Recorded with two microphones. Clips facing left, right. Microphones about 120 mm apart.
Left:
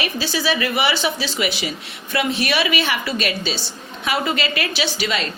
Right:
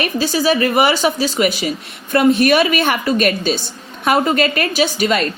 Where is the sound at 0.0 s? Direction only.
45° right (ahead or behind).